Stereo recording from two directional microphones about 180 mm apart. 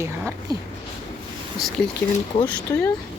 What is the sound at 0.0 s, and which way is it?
Speech, 15° right (ahead or behind).